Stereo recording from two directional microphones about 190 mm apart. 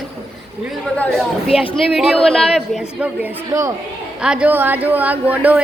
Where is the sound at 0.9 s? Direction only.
5° left (ahead or behind); by 3.7 s 15° right (ahead or behind).